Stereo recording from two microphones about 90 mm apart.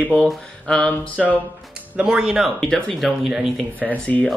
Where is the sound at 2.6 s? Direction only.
10° left (ahead or behind).